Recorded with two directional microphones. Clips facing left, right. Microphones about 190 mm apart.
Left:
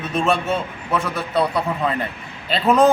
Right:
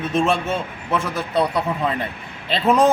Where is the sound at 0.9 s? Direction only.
Centre (ahead or behind).